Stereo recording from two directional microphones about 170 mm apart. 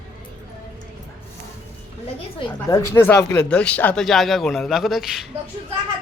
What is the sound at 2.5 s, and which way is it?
Speech, 20° left (ahead or behind).